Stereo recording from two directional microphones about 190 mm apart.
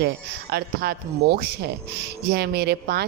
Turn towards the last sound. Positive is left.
turn(degrees=-60)  # may be behind; listen again after turning